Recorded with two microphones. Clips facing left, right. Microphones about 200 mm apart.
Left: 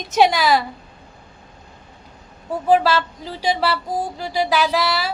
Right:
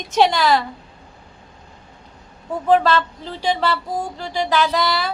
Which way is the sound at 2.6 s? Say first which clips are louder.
Even; 10° left (ahead or behind).